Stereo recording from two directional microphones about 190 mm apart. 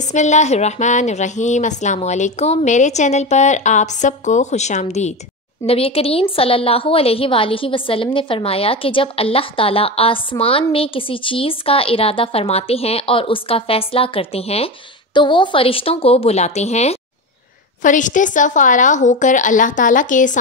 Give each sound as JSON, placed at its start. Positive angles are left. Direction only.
{"t": 0.1, "sound": "a woman's voice", "side_deg": 40}